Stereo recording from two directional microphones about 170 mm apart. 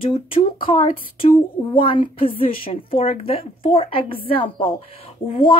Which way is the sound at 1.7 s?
30° left (ahead or behind).